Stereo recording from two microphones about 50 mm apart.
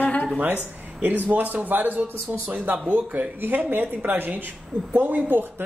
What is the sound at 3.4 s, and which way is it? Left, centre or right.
Speech, right.